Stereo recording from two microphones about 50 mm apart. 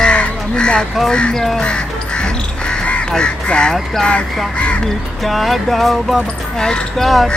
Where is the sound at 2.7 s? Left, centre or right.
Left.